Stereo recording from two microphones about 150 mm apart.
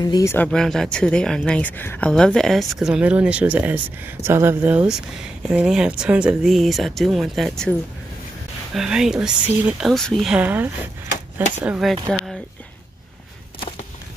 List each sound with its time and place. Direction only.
0.0 s speech: 25° left (ahead or behind)
0.5 s speech: 5° left (ahead or behind)
8.7 s speech: 5° right (ahead or behind)